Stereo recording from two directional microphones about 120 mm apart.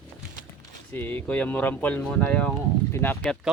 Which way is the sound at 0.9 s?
15° left (ahead or behind).